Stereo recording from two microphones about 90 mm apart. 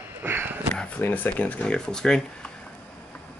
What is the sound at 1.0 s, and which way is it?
Speech, 20° left (ahead or behind).